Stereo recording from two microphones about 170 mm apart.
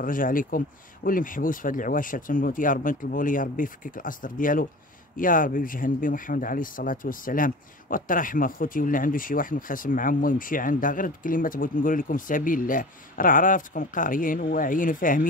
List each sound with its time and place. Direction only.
0.0 s speech: 55° left (ahead or behind)